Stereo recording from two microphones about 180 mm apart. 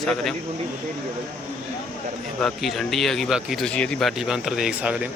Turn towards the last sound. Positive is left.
turn(degrees=-5)  # may be behind; listen again after turning